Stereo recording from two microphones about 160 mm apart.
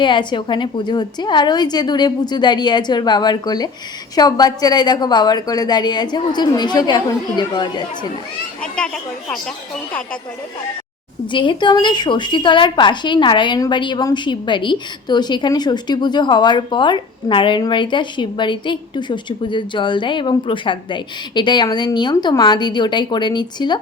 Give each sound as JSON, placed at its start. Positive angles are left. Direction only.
{"t": 0.0, "sound": "a woman's voice", "side_deg": 30}
{"t": 8.6, "sound": "a child's voice", "side_deg": 5}
{"t": 11.3, "sound": "a woman's voice", "side_deg": 30}